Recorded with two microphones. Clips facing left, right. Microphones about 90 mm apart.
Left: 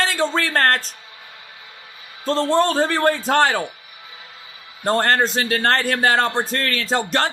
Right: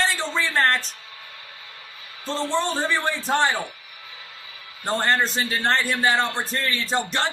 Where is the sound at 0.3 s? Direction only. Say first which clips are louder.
Left 1 dB; 60° left (ahead or behind).